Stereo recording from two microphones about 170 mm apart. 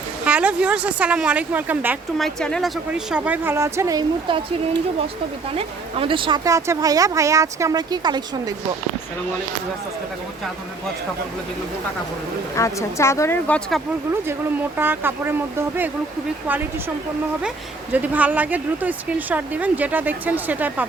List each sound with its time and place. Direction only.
0.3 s speech: 5° right (ahead or behind)
2.1 s speech: 5° left (ahead or behind); by 4.4 s 25° right (ahead or behind)
5.5 s speech: 30° right (ahead or behind)
12.5 s speech: 15° left (ahead or behind)
14.3 s speech: 10° right (ahead or behind)
17.9 s speech: 10° right (ahead or behind)